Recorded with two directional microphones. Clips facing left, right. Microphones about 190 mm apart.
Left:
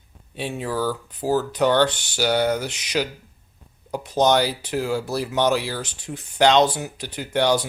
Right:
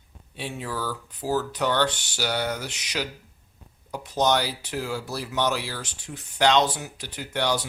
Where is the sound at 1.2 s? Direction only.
25° left (ahead or behind).